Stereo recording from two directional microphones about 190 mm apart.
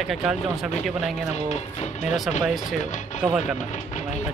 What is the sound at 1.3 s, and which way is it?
Speech, 35° left (ahead or behind).